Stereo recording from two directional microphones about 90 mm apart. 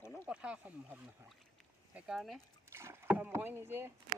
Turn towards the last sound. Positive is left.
turn(degrees=-25)  # may be behind; listen again after turning